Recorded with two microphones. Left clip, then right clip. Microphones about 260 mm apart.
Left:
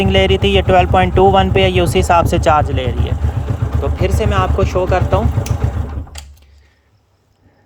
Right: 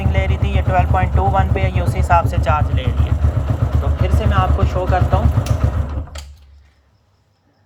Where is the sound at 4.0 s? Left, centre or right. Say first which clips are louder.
Left 3 dB; left.